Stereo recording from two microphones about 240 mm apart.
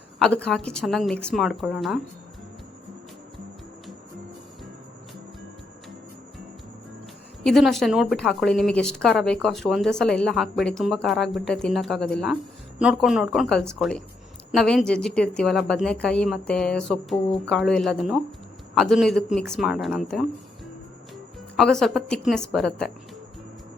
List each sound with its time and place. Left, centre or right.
0.4 s a woman's voice: centre
7.4 s a woman's voice: centre
21.5 s a woman's voice: centre